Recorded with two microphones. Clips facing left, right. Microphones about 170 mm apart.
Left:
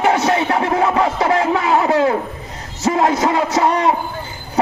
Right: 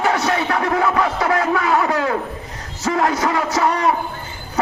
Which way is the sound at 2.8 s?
25° left (ahead or behind).